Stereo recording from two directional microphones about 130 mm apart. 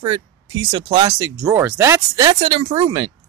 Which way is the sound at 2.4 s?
60° right (ahead or behind).